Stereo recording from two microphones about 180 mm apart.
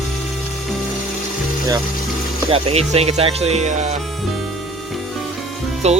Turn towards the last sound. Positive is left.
turn(degrees=-35)  # may be behind; listen again after turning